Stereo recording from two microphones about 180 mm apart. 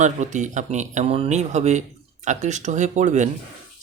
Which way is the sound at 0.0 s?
40° right (ahead or behind).